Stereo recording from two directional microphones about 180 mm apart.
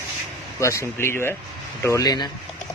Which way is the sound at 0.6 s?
15° left (ahead or behind).